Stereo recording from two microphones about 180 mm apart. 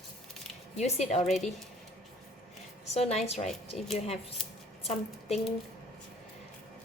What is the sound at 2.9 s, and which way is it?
A woman's voice, 35° left (ahead or behind).